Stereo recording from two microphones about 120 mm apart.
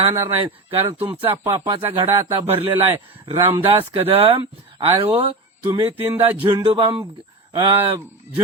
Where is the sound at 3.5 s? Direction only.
50° right (ahead or behind).